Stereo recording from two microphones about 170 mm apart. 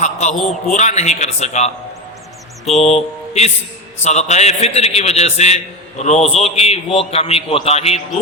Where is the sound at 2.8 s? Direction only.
40° left (ahead or behind).